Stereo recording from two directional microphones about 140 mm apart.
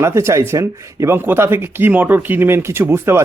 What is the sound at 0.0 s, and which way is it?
Speech, 20° right (ahead or behind).